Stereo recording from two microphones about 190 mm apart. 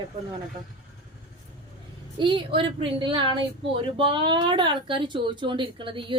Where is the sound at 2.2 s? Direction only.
25° right (ahead or behind).